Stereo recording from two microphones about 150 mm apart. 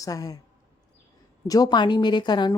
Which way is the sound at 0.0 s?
25° left (ahead or behind).